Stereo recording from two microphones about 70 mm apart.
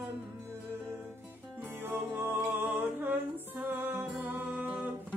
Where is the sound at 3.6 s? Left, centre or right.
Right.